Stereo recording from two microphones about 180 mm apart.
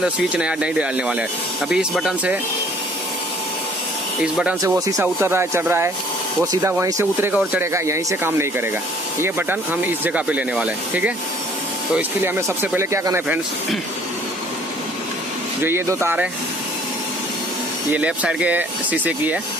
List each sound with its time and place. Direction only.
0.0 s speech: 5° right (ahead or behind)
4.2 s speech: 5° right (ahead or behind)
12.2 s speech: 15° right (ahead or behind)
15.6 s speech: 15° right (ahead or behind)
17.9 s speech: 5° right (ahead or behind)